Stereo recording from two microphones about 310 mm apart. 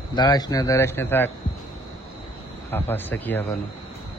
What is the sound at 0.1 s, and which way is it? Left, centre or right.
A man's voice, centre.